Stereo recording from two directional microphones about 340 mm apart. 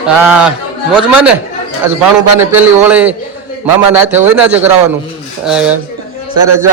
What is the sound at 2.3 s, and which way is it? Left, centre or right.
A man's voice, centre.